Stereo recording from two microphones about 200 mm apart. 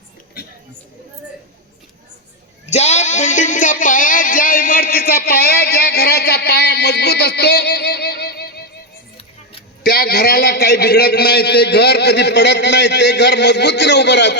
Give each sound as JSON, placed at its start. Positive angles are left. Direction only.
{"t": 2.6, "sound": "a sound", "side_deg": 35}
{"t": 9.1, "sound": "music", "side_deg": 25}
{"t": 9.8, "sound": "a man's voice", "side_deg": 50}